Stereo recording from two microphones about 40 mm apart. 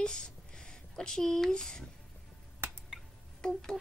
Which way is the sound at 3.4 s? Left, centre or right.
Centre.